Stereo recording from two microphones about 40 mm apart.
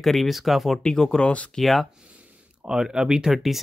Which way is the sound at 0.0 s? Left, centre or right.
Centre.